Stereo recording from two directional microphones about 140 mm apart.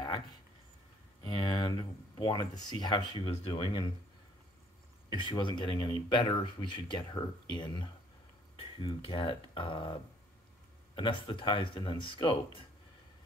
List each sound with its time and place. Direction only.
1.2 s speech: 30° left (ahead or behind)
5.1 s speech: 35° left (ahead or behind)
11.0 s speech: 35° left (ahead or behind)